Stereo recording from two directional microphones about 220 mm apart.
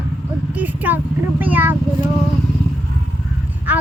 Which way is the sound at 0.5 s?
10° right (ahead or behind).